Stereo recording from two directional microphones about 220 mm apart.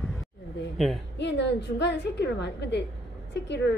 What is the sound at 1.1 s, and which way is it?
A woman's voice, 50° left (ahead or behind).